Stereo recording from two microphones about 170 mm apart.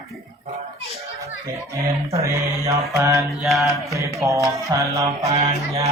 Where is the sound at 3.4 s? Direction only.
Centre (ahead or behind).